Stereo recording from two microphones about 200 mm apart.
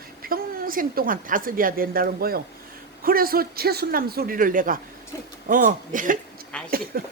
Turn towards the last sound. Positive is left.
turn(degrees=-45)  # may be behind; listen again after turning